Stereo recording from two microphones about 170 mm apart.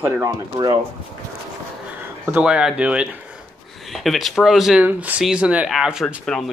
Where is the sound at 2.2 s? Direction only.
5° right (ahead or behind).